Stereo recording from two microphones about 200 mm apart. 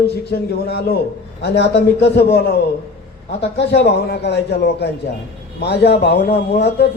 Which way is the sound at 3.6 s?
60° left (ahead or behind).